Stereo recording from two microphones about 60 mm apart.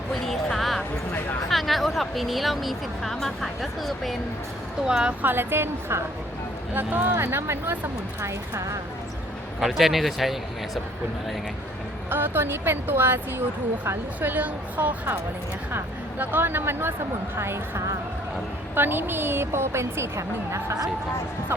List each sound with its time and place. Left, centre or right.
0.1 s a sound: centre
1.5 s speech: centre
4.9 s a woman's voice: centre
5.2 s a woman's voice: right
6.7 s a woman's voice: right
8.2 s speech: right
9.6 s speech: centre
12.1 s a woman's voice: right
14.2 s a woman's voice: right
17.3 s a woman's voice: right
18.7 s a woman's voice: right